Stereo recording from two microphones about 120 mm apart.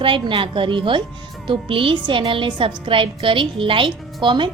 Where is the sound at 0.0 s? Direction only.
45° right (ahead or behind).